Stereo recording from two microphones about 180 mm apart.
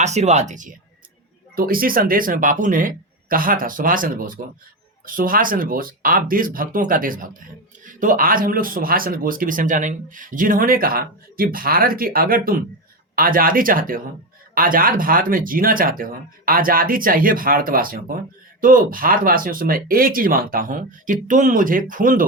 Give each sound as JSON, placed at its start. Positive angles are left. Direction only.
{"t": 0.0, "sound": "speech", "side_deg": -40}
{"t": 1.5, "sound": "speech", "side_deg": -55}